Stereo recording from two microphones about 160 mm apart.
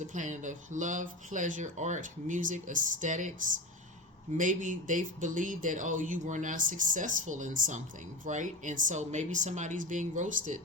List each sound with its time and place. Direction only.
0.1 s speech: 50° right (ahead or behind)